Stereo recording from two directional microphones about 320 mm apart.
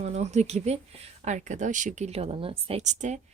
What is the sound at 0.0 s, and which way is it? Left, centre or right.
Speech, right.